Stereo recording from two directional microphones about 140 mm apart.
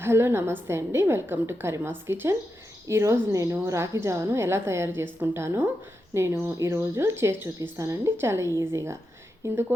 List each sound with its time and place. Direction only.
0.0 s a woman's voice: 15° right (ahead or behind)